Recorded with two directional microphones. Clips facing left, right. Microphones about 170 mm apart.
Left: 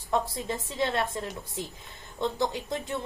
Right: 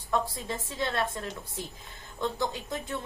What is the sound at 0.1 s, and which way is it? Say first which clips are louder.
A woman's voice: left 2 dB; 20° left (ahead or behind).